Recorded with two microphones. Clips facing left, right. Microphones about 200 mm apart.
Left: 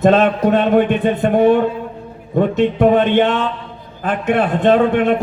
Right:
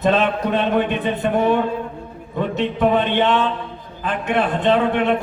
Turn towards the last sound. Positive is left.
turn(degrees=50)  # may be behind; listen again after turning